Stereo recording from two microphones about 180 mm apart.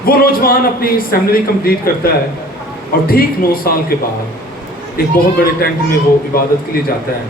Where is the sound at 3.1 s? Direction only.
55° left (ahead or behind).